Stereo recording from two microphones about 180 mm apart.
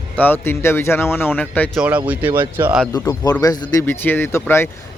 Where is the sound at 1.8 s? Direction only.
10° right (ahead or behind).